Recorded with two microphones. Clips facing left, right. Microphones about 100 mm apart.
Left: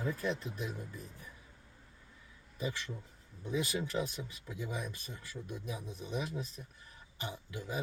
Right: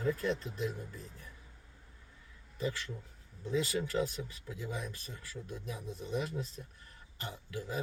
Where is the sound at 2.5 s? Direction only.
15° left (ahead or behind).